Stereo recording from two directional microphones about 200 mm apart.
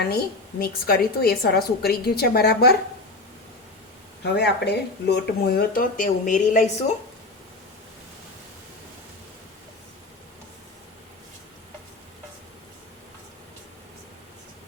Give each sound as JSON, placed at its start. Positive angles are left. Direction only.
{"t": 0.6, "sound": "speech", "side_deg": 50}
{"t": 4.2, "sound": "speech", "side_deg": 55}